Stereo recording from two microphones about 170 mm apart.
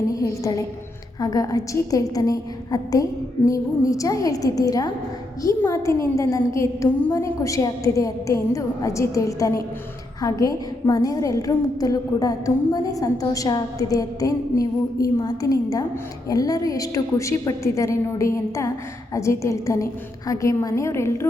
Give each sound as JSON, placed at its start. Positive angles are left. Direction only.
{"t": 0.1, "sound": "a woman's voice", "side_deg": 20}